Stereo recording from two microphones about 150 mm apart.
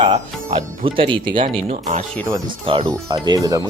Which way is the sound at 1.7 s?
50° right (ahead or behind).